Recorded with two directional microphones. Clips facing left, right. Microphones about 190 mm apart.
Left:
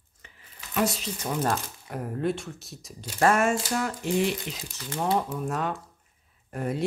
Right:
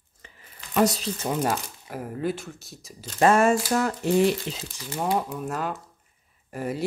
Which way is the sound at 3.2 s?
30° right (ahead or behind).